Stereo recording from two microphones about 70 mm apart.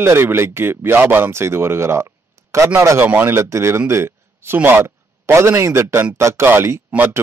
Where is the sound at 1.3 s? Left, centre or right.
Right.